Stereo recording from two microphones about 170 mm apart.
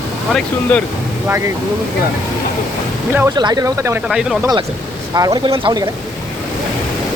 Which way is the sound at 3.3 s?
25° right (ahead or behind).